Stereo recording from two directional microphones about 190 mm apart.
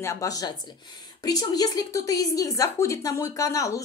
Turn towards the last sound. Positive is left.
turn(degrees=15)  # may be behind; listen again after turning